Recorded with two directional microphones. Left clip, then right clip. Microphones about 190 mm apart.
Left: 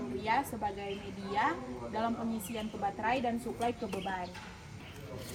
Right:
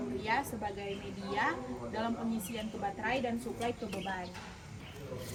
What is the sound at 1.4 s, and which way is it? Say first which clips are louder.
Speech: left 2 dB; 15° left (ahead or behind).